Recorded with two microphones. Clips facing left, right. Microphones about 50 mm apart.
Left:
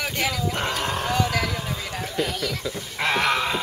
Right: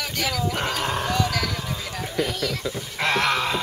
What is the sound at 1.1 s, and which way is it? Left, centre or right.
Vehicle, left.